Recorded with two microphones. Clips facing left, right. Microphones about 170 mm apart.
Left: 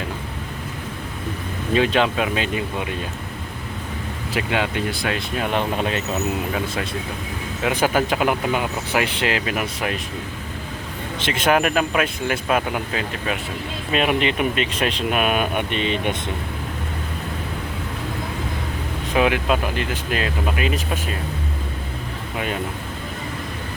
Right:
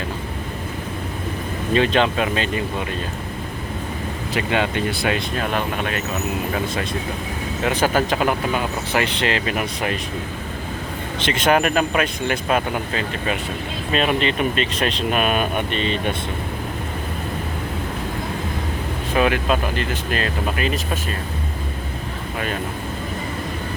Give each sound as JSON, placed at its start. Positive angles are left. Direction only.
{"t": 1.7, "sound": "speech", "side_deg": 5}
{"t": 4.4, "sound": "speech", "side_deg": 5}
{"t": 5.4, "sound": "speech", "side_deg": 20}
{"t": 7.6, "sound": "speech", "side_deg": 10}
{"t": 11.2, "sound": "speech", "side_deg": 5}
{"t": 19.1, "sound": "speech", "side_deg": 10}